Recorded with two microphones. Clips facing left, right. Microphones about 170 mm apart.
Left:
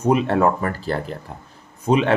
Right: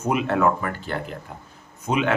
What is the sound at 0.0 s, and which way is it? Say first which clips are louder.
Speech: left 4 dB; 35° left (ahead or behind).